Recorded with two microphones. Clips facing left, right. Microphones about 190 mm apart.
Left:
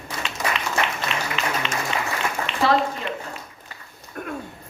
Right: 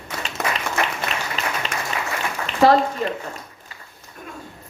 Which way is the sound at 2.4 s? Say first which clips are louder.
Right 6 dB; 40° right (ahead or behind).